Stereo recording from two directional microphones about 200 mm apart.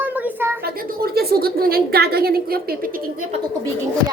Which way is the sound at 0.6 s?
50° right (ahead or behind).